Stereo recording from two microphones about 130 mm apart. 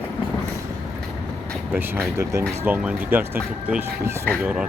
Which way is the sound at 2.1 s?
20° right (ahead or behind).